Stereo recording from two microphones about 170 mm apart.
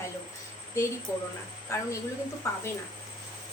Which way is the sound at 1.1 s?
20° left (ahead or behind).